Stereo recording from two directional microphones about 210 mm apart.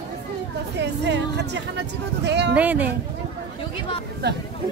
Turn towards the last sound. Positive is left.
turn(degrees=-55)  # may be behind; listen again after turning